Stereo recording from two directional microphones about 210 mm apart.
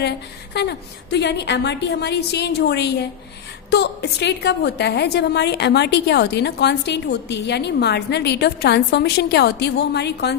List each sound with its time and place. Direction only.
0.5 s a woman's voice: 50° left (ahead or behind)